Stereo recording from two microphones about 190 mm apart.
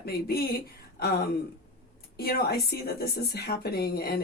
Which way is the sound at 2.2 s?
55° left (ahead or behind).